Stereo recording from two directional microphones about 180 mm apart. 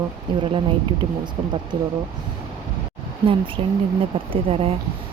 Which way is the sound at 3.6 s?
30° right (ahead or behind).